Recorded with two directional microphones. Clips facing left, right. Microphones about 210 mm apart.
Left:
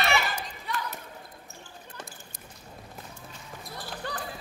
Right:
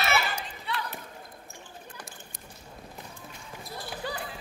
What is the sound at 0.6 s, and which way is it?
Basketball bounce, 45° left (ahead or behind).